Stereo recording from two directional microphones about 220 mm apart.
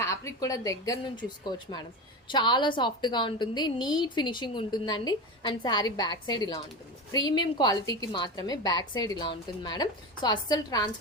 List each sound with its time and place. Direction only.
0.0 s a woman's voice: 15° left (ahead or behind)